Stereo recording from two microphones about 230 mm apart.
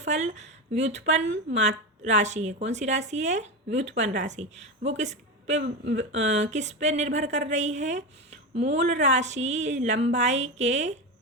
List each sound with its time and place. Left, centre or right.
0.0 s speech: right
5.6 s speech: right
6.1 s speech: right